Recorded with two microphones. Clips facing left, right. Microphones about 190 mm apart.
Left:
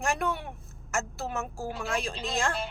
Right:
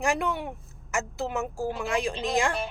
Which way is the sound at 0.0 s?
15° right (ahead or behind).